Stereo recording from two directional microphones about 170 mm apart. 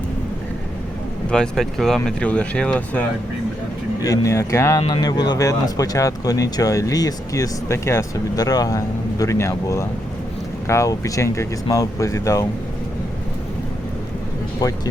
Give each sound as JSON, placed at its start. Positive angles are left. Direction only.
{"t": 1.3, "sound": "speech", "side_deg": 5}
{"t": 4.0, "sound": "speech", "side_deg": 20}
{"t": 14.6, "sound": "speech", "side_deg": 20}